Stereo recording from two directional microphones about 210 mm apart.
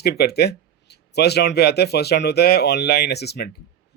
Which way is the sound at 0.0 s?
50° left (ahead or behind).